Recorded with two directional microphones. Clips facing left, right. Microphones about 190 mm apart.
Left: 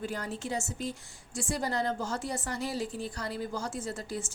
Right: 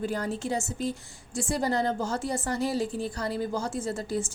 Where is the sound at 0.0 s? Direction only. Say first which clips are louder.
Right 6 dB; 35° right (ahead or behind).